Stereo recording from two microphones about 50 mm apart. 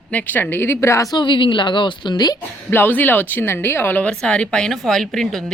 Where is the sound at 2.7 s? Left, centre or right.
Left.